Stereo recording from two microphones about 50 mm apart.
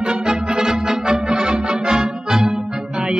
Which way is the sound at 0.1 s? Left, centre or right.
Centre.